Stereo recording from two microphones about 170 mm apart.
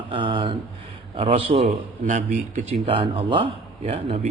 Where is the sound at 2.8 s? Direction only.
35° right (ahead or behind).